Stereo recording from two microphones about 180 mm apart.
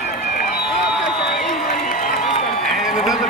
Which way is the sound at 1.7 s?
50° left (ahead or behind).